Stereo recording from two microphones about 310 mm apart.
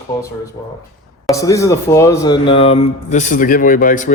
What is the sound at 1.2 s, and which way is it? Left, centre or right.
Speech, centre.